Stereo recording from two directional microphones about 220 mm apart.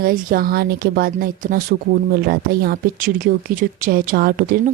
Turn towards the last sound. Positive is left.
turn(degrees=-45)  # may be behind; listen again after turning